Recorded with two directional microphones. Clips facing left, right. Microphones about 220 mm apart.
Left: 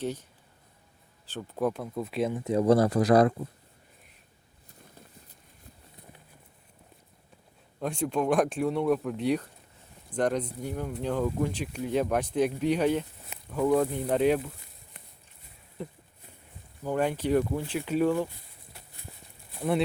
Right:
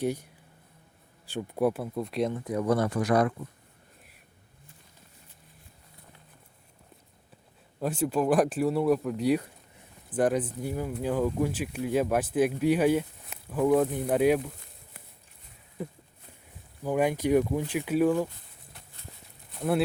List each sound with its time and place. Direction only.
0.0 s speech: 10° right (ahead or behind)
1.3 s speech: 10° right (ahead or behind)
2.4 s speech: 25° left (ahead or behind)
7.8 s speech: 5° right (ahead or behind)
16.8 s speech: 10° right (ahead or behind)
19.5 s a sound: centre (ahead or behind)